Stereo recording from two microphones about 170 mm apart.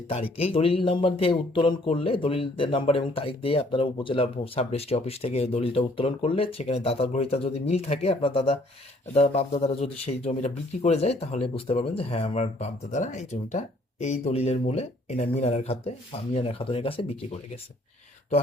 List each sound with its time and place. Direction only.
0.3 s speech: 35° left (ahead or behind)